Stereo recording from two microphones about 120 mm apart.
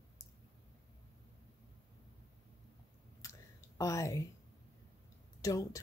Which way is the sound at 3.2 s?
25° left (ahead or behind).